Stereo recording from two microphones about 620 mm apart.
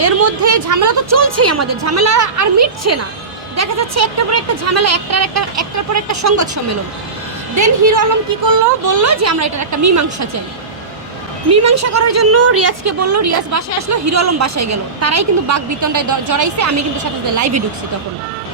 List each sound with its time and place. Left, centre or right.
0.0 s a woman's voice: right
8.4 s a woman's voice: right
11.5 s a woman's voice: right